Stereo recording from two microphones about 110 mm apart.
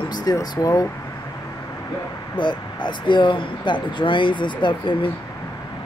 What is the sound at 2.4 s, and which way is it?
Speech, 45° left (ahead or behind).